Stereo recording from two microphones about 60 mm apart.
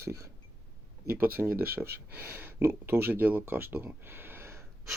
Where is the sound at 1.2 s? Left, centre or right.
Right.